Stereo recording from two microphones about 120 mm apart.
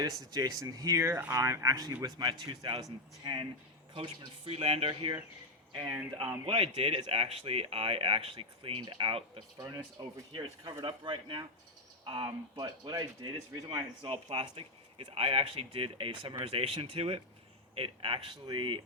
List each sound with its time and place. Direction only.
0.0 s speech: 35° right (ahead or behind)
3.9 s speech: 45° right (ahead or behind)
9.6 s speech: 30° right (ahead or behind)